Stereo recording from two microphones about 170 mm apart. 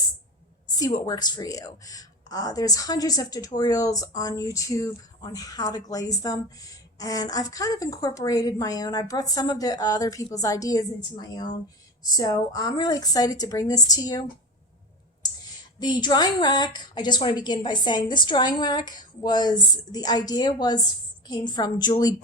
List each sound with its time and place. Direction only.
0.7 s speech: 25° left (ahead or behind)
12.0 s speech: 20° left (ahead or behind)
15.8 s speech: 25° left (ahead or behind)